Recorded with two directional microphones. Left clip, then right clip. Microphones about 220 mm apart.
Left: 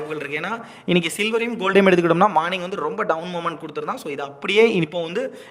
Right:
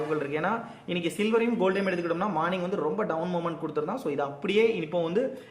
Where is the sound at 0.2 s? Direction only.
50° left (ahead or behind).